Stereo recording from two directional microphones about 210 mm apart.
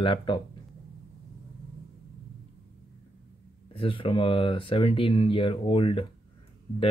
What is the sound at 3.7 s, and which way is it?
Speech, 25° left (ahead or behind).